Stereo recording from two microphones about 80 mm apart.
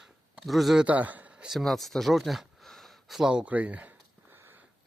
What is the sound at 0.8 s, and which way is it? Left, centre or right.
Speech, centre.